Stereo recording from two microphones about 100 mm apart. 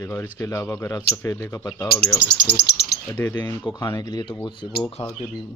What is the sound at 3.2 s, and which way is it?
Speech, 20° left (ahead or behind).